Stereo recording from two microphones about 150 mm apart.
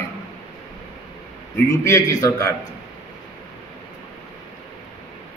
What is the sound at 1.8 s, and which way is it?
Speech, 20° left (ahead or behind).